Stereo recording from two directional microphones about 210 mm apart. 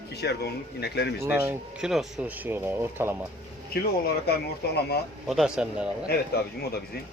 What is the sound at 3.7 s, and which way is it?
Speech, 45° left (ahead or behind).